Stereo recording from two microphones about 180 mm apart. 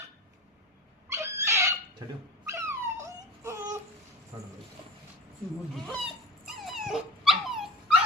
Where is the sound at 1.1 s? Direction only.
15° right (ahead or behind).